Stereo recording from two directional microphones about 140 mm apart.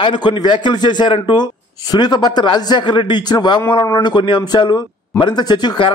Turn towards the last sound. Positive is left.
turn(degrees=35)  # may be behind; listen again after turning